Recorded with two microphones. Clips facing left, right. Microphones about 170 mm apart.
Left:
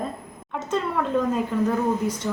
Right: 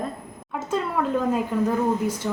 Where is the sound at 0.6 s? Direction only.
5° right (ahead or behind).